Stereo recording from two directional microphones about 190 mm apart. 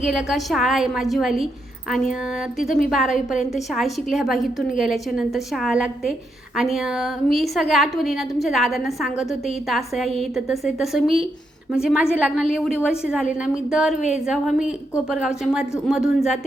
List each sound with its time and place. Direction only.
0.0 s a woman's voice: centre (ahead or behind)
2.9 s a woman's voice: centre (ahead or behind)